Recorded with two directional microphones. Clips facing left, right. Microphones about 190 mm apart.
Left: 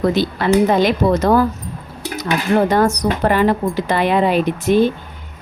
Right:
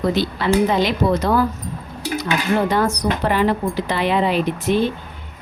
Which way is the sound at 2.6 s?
45° left (ahead or behind).